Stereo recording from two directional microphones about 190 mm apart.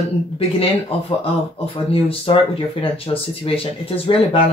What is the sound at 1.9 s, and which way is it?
Speech, 30° left (ahead or behind).